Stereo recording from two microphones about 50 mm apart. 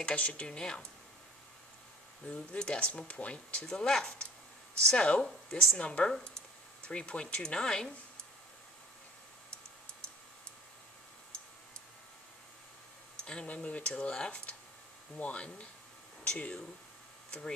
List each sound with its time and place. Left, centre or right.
0.0 s speech: left
2.2 s speech: centre
3.6 s speech: centre
5.2 s speech: centre
5.8 s speech: left
13.2 s a sound: centre
13.5 s speech: left
13.9 s speech: centre